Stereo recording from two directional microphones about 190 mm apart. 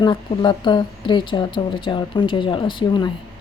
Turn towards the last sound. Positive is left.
turn(degrees=25)  # may be behind; listen again after turning